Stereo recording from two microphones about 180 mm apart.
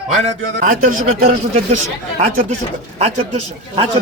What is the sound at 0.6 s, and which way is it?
Speech, 50° right (ahead or behind).